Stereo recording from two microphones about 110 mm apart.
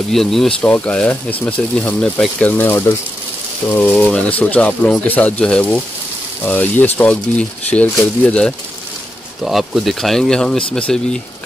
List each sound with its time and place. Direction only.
0.1 s speech: 5° left (ahead or behind)
2.5 s speech: 20° left (ahead or behind)
3.9 s speech: 10° left (ahead or behind)
9.4 s speech: centre (ahead or behind)